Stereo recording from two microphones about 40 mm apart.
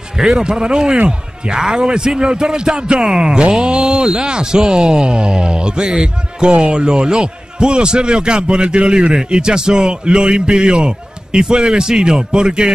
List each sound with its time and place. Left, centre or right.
0.4 s a man's voice: right